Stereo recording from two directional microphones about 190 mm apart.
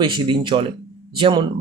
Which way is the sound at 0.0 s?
25° right (ahead or behind).